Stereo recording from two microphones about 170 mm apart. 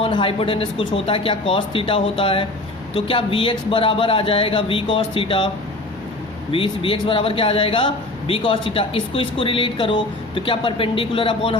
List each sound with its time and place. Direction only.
0.0 s a man's voice: 30° left (ahead or behind)
6.5 s a man's voice: 30° left (ahead or behind)